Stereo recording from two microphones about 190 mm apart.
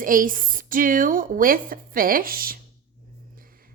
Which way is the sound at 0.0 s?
45° right (ahead or behind).